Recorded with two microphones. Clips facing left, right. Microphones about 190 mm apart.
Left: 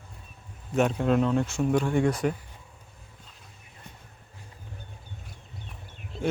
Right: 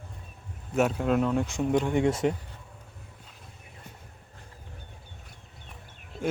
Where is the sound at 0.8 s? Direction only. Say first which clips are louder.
Left 1 dB; 5° right (ahead or behind); by 2.3 s 25° right (ahead or behind).